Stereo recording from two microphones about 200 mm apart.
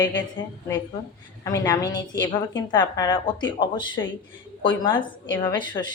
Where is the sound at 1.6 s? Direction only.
20° left (ahead or behind).